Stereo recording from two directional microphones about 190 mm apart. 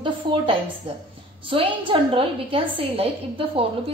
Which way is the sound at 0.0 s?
25° right (ahead or behind).